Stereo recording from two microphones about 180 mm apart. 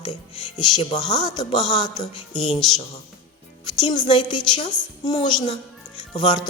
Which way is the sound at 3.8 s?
25° left (ahead or behind).